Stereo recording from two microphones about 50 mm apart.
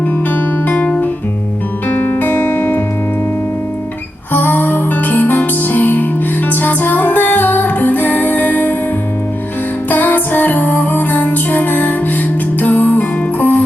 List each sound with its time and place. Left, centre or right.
1.9 s music: left
4.3 s music: left
9.9 s music: left